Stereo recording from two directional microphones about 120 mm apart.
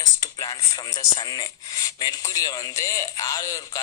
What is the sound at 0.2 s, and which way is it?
Speech, 30° left (ahead or behind).